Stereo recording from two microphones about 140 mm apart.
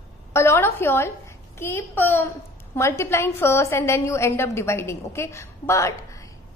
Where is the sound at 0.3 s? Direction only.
20° left (ahead or behind).